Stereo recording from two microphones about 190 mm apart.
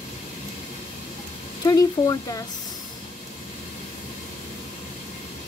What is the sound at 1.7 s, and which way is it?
Speech, 20° left (ahead or behind).